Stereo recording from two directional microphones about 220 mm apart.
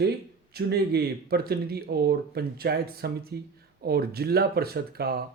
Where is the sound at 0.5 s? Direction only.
45° right (ahead or behind).